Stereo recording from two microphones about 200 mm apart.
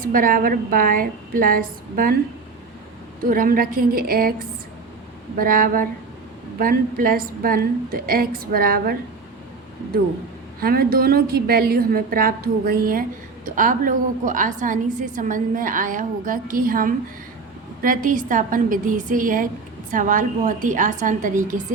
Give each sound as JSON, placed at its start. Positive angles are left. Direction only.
{"t": 0.0, "sound": "a woman's voice", "side_deg": -45}
{"t": 3.2, "sound": "a woman's voice", "side_deg": -45}
{"t": 10.6, "sound": "a woman's voice", "side_deg": -50}